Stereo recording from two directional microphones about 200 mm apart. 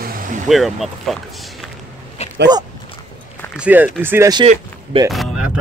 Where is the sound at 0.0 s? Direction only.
45° right (ahead or behind).